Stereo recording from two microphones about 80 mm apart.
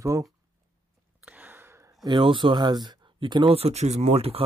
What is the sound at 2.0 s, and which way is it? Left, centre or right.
Speech, right.